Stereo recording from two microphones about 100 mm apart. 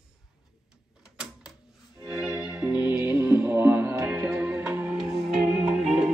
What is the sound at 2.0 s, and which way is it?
Music, 5° right (ahead or behind).